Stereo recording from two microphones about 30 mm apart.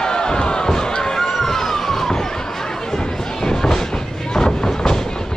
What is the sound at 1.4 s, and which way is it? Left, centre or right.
Police car, centre.